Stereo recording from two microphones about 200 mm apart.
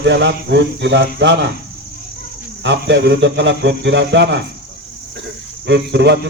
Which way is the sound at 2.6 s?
60° right (ahead or behind).